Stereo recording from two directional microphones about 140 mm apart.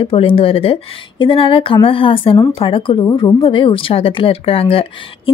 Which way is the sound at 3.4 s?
40° left (ahead or behind).